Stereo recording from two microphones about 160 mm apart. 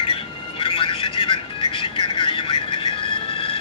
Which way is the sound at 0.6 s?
35° left (ahead or behind).